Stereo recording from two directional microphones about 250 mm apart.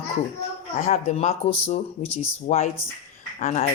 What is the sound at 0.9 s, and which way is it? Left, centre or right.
Speech, left.